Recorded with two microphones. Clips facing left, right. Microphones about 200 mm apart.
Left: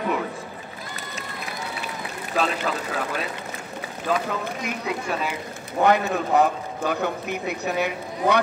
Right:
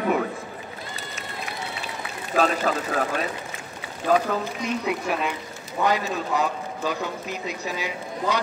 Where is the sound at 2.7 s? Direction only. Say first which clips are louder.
Right 3 dB; 40° right (ahead or behind).